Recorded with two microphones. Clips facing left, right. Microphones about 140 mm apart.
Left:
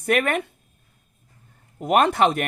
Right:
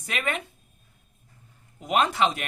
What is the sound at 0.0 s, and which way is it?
Speech, 55° left (ahead or behind).